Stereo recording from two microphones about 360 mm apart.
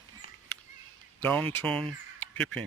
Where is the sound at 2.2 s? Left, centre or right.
Centre.